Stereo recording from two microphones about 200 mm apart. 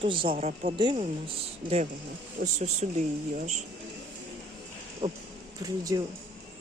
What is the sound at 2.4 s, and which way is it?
Speech, 35° right (ahead or behind).